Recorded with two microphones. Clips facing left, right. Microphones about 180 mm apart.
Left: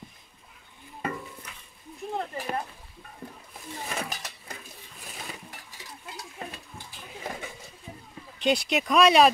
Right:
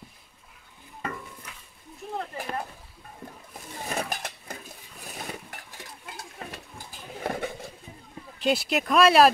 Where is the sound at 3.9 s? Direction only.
55° right (ahead or behind).